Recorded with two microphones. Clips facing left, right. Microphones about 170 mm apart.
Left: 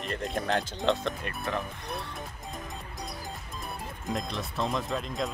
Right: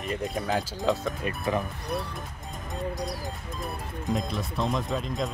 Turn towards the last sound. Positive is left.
turn(degrees=0)  # may be behind; listen again after turning